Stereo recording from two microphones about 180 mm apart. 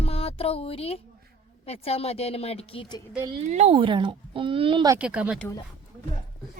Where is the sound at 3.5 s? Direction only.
35° right (ahead or behind).